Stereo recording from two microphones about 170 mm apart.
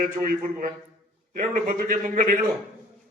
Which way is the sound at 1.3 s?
60° right (ahead or behind).